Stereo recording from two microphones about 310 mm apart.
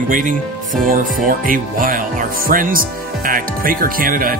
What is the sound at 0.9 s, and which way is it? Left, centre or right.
Music, right.